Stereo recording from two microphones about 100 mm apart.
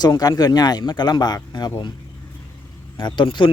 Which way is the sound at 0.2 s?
40° left (ahead or behind).